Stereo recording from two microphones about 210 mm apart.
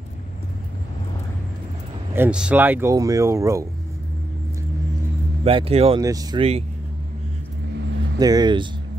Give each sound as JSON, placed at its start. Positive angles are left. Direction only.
{"t": 2.1, "sound": "speech", "side_deg": -5}
{"t": 5.4, "sound": "speech", "side_deg": -25}
{"t": 6.0, "sound": "speech", "side_deg": -15}
{"t": 8.2, "sound": "speech", "side_deg": -20}